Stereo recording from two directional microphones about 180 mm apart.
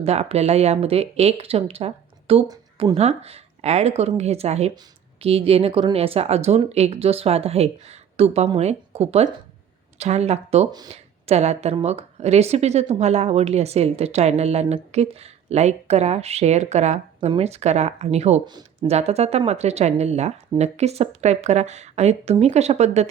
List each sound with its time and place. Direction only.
0.0 s speech: 35° right (ahead or behind)
18.4 s speech: 25° right (ahead or behind)
18.9 s speech: 35° right (ahead or behind)